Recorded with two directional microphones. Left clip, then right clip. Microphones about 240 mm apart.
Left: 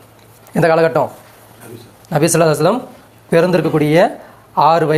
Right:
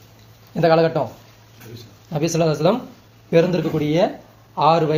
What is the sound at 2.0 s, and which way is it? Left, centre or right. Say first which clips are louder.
Speech: left 7 dB; centre.